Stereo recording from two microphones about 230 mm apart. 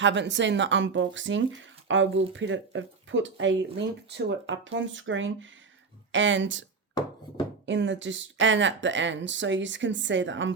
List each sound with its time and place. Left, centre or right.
0.0 s speech: right